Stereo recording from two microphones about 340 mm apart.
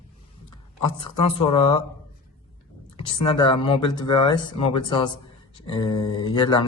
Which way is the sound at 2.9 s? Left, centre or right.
Centre.